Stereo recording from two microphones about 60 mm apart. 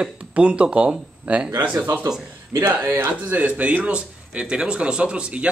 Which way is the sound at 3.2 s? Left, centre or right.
Right.